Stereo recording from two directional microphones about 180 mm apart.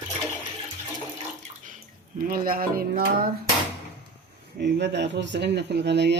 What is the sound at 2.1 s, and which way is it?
Speech, 50° right (ahead or behind).